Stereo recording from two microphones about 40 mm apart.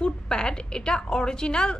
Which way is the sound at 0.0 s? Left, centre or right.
Left.